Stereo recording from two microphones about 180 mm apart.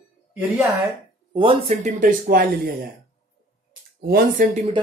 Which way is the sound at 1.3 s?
35° right (ahead or behind).